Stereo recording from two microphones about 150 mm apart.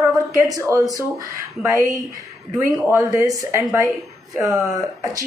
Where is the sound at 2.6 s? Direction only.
15° right (ahead or behind).